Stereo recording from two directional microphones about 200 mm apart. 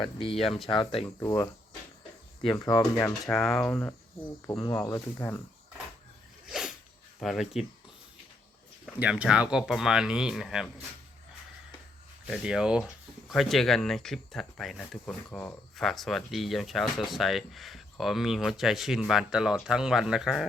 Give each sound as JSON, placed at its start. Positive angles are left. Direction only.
{"t": 0.0, "sound": "speech", "side_deg": 25}
{"t": 0.3, "sound": "speech", "side_deg": 0}
{"t": 0.7, "sound": "speech", "side_deg": 25}
{"t": 2.6, "sound": "speech", "side_deg": 15}
{"t": 3.3, "sound": "speech", "side_deg": 0}
{"t": 4.6, "sound": "speech", "side_deg": 20}
{"t": 6.5, "sound": "dog", "side_deg": -5}
{"t": 7.2, "sound": "speech", "side_deg": 0}
{"t": 9.0, "sound": "speech", "side_deg": -5}
{"t": 12.2, "sound": "speech", "side_deg": -5}